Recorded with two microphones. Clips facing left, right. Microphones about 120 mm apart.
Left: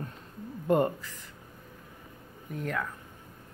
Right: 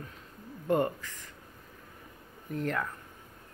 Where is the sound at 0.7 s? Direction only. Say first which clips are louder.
Left 2 dB; 20° left (ahead or behind).